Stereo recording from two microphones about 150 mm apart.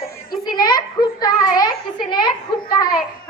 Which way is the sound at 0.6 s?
25° left (ahead or behind).